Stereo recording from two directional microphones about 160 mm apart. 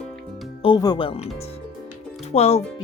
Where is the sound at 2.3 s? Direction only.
40° left (ahead or behind).